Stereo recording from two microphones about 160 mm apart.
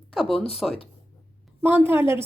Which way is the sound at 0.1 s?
Centre (ahead or behind).